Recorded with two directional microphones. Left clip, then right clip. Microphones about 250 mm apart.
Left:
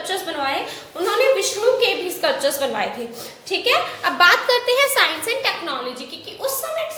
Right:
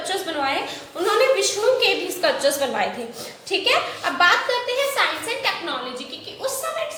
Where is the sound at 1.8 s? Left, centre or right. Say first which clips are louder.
Left 1 dB; centre.